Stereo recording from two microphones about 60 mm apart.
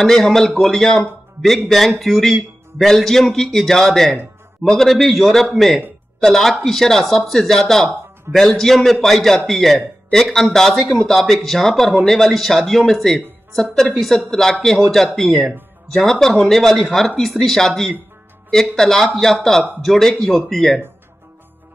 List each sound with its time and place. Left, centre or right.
0.0 s a man's voice: centre